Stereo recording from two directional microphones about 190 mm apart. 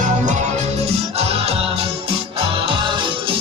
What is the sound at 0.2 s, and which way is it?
Music, 40° right (ahead or behind).